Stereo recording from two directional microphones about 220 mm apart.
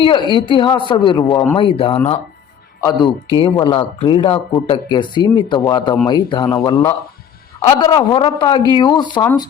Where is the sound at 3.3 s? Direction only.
25° left (ahead or behind).